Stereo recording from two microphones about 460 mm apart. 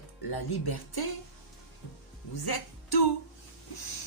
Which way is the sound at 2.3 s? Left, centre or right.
Left.